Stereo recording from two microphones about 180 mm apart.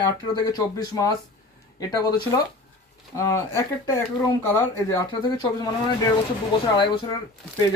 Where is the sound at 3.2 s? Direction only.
20° left (ahead or behind).